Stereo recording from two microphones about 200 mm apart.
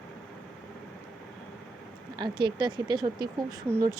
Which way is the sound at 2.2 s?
25° right (ahead or behind).